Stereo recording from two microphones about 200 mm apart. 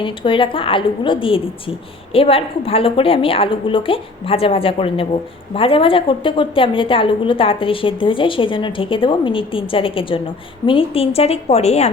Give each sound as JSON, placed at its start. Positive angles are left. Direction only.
{"t": 0.0, "sound": "a woman's voice", "side_deg": 25}